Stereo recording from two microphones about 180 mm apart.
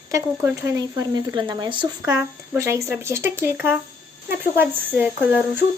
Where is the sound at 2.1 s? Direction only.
15° right (ahead or behind).